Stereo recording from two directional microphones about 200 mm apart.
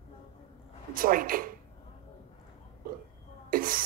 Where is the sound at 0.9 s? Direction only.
45° right (ahead or behind).